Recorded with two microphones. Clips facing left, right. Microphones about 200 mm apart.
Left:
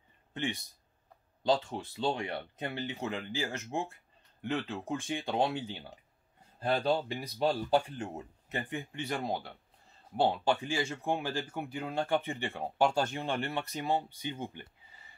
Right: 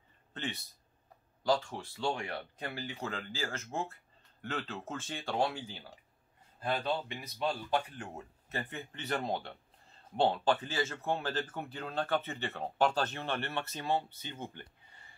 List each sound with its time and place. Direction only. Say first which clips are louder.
0.3 s speech: left 4 dB; 15° left (ahead or behind)
6.6 s speech: left 4 dB; 35° left (ahead or behind); by 14.7 s 15° left (ahead or behind)